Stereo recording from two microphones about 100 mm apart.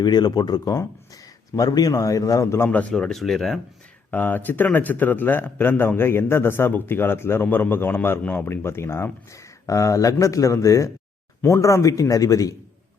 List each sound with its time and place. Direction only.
0.0 s a man's voice: 45° left (ahead or behind)
2.9 s speech: 5° left (ahead or behind)
4.1 s a man's voice: 20° left (ahead or behind); by 12.5 s 35° left (ahead or behind)